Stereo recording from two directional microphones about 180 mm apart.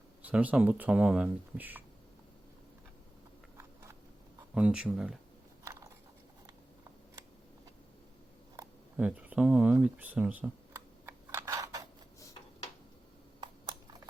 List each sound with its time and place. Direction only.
0.2 s speech: 10° right (ahead or behind)
4.5 s speech: 5° right (ahead or behind)
9.0 s speech: 5° right (ahead or behind)
11.0 s a sound: 15° right (ahead or behind)